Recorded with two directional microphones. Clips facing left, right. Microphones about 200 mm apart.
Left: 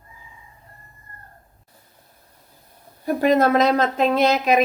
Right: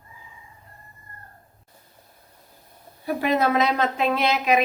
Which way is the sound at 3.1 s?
45° left (ahead or behind).